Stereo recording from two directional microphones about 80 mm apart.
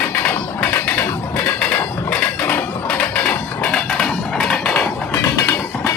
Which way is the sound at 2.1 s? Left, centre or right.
Left.